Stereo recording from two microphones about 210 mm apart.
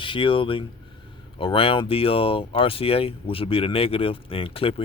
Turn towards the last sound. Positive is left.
turn(degrees=25)  # may be behind; listen again after turning